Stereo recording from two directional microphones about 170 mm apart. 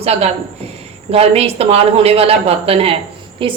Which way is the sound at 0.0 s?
35° right (ahead or behind).